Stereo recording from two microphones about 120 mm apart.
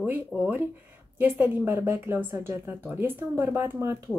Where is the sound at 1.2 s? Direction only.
15° right (ahead or behind).